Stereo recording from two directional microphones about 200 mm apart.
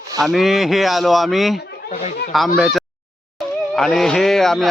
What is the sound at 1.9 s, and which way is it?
Speech, 35° left (ahead or behind).